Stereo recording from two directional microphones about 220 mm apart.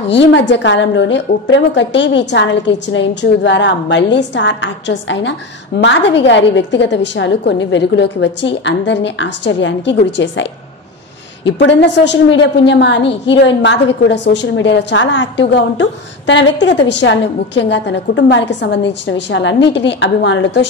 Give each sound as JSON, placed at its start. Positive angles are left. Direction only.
{"t": 0.0, "sound": "a woman's voice", "side_deg": 55}